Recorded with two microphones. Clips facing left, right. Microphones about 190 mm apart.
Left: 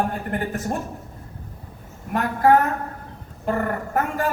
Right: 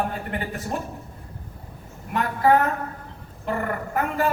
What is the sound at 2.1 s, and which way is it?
A man's voice, 45° left (ahead or behind).